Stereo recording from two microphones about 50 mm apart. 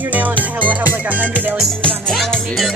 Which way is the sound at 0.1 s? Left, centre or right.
Right.